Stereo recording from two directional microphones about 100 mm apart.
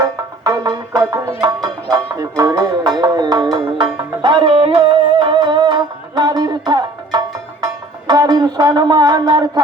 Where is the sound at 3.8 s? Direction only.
55° right (ahead or behind).